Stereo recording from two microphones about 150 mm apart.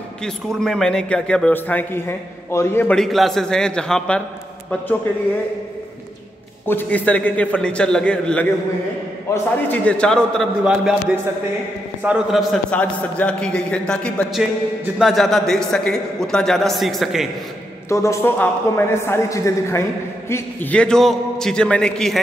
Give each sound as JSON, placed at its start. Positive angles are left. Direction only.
{"t": 0.2, "sound": "a man's voice", "side_deg": 5}
{"t": 6.6, "sound": "a man's voice", "side_deg": 15}
{"t": 12.0, "sound": "a man's voice", "side_deg": -5}
{"t": 17.8, "sound": "a woman's voice", "side_deg": 20}
{"t": 20.8, "sound": "a man's voice", "side_deg": 5}